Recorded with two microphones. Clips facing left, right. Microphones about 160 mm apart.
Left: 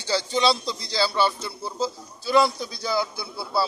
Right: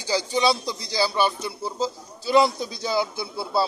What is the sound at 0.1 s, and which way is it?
A man's voice, 15° right (ahead or behind).